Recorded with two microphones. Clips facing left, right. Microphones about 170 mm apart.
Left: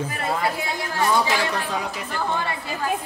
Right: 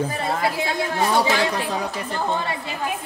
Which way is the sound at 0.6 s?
25° right (ahead or behind).